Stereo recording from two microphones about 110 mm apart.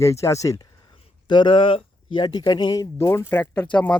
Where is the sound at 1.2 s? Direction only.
45° left (ahead or behind).